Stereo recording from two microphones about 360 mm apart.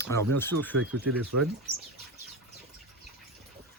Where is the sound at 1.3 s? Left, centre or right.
Right.